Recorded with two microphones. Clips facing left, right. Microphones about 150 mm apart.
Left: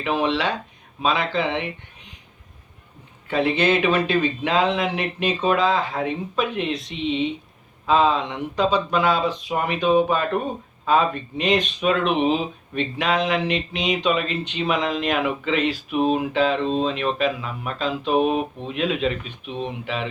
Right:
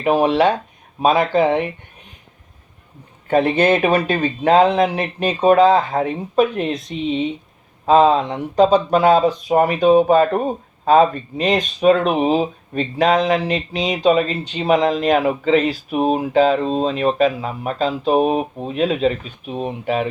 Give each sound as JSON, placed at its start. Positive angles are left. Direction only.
{"t": 0.0, "sound": "speech", "side_deg": -45}
{"t": 3.2, "sound": "speech", "side_deg": -45}